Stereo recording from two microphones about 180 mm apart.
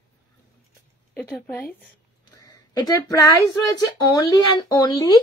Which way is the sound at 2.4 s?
20° left (ahead or behind).